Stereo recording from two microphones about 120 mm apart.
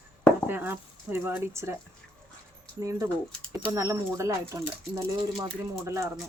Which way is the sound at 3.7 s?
25° right (ahead or behind).